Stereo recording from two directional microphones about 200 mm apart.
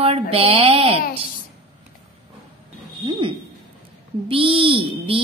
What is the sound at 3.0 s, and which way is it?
Speech, 25° right (ahead or behind).